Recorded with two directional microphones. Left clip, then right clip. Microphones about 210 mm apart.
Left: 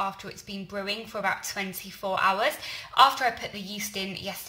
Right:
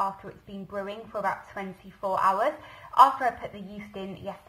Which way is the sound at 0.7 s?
25° left (ahead or behind).